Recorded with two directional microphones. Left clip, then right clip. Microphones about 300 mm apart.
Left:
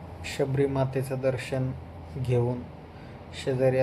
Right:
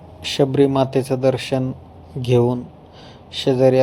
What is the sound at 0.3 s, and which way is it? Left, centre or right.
Speech, right.